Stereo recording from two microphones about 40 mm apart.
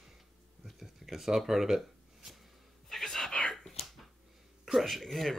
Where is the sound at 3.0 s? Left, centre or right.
Centre.